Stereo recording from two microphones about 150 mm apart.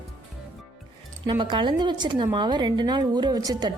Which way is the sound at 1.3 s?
30° right (ahead or behind).